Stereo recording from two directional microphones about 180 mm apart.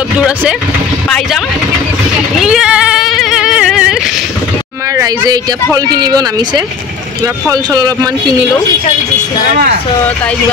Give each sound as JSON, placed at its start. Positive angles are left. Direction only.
{"t": 2.4, "sound": "cat", "side_deg": -5}
{"t": 4.9, "sound": "speech", "side_deg": -20}